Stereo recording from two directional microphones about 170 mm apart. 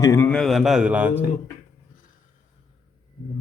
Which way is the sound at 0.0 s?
15° left (ahead or behind).